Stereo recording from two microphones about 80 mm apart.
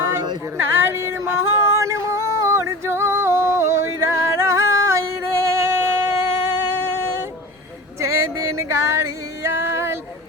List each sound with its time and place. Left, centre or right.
0.5 s a sound: right
1.7 s music: right
7.9 s female singing: right